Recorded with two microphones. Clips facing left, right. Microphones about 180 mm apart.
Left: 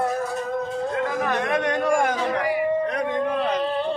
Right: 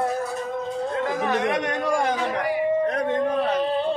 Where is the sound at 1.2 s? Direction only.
20° right (ahead or behind).